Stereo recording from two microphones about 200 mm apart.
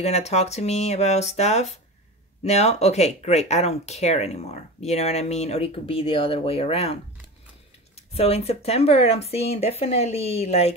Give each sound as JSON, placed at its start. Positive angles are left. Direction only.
{"t": 0.0, "sound": "speech", "side_deg": 35}